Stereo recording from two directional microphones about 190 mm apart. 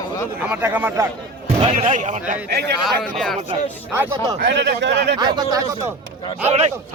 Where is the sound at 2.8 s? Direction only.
Centre (ahead or behind).